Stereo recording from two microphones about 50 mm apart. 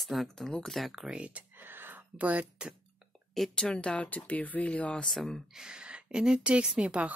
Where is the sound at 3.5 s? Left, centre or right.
Centre.